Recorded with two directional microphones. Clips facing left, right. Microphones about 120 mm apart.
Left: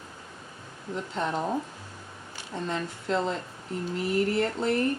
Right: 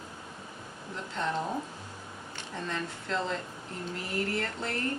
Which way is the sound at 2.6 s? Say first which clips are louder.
Left 5 dB; 20° left (ahead or behind).